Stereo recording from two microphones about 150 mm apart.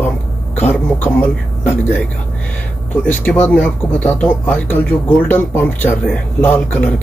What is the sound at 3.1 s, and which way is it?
Speech, 10° left (ahead or behind).